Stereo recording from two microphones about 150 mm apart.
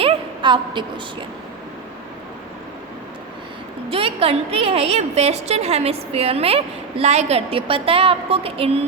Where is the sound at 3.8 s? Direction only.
40° right (ahead or behind).